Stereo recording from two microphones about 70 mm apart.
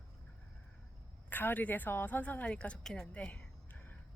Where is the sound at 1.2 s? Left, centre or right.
Left.